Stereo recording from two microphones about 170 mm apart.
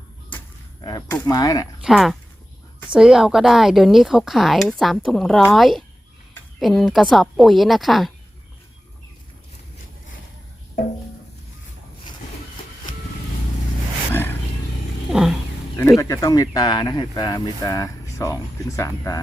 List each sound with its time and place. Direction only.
0.3 s arrow: 25° left (ahead or behind)
1.1 s speech: 20° left (ahead or behind)
1.8 s speech: centre (ahead or behind)
14.1 s roaring cats: 10° left (ahead or behind)
15.1 s a sound: 5° right (ahead or behind)
16.0 s speech: 20° left (ahead or behind)